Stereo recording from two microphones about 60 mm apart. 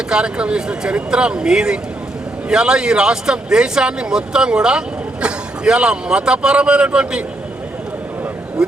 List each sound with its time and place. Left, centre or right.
0.1 s speech: centre